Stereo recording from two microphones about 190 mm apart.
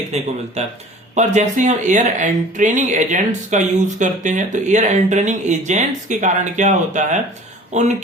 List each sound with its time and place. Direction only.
0.1 s speech: 35° right (ahead or behind)